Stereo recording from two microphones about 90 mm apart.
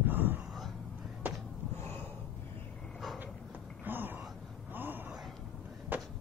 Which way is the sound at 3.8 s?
20° right (ahead or behind).